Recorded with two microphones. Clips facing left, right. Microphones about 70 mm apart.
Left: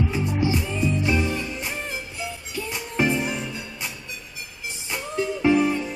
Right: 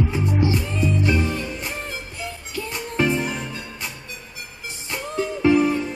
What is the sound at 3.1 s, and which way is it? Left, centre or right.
Music, right.